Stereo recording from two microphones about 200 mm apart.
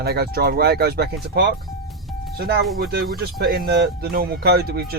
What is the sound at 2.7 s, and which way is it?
Speech, 50° right (ahead or behind).